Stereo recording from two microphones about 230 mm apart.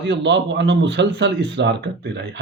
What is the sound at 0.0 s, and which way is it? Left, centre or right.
Speech, right.